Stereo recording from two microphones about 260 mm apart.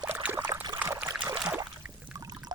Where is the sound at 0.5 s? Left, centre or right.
Centre.